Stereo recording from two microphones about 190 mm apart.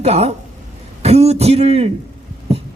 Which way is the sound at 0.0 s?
35° right (ahead or behind).